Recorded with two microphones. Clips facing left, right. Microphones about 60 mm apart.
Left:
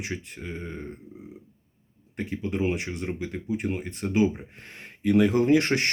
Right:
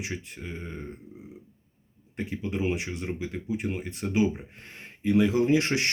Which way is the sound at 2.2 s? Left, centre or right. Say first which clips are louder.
Left 2 dB; left.